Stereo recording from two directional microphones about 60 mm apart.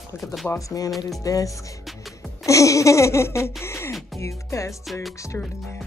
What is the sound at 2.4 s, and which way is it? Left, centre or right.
Laughter, left.